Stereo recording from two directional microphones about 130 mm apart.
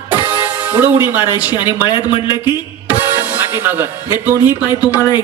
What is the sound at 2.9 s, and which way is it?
Speech, 15° right (ahead or behind).